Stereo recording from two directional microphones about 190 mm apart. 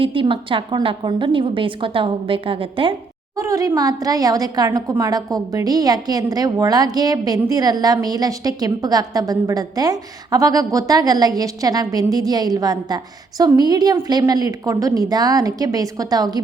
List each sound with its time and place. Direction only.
0.0 s a woman's voice: 25° right (ahead or behind)
3.3 s a woman's voice: 15° right (ahead or behind)